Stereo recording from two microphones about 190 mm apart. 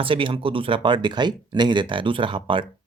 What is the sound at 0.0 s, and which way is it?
Speech, 25° right (ahead or behind).